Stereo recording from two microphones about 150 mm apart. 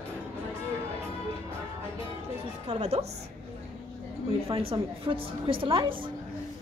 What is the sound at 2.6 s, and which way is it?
Speech, 45° right (ahead or behind).